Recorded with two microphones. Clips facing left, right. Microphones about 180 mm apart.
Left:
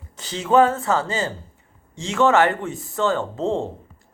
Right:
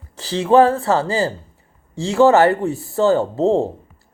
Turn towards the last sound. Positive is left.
turn(degrees=-35)  # may be behind; listen again after turning